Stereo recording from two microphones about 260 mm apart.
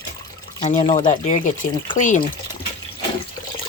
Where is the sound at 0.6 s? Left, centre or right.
Left.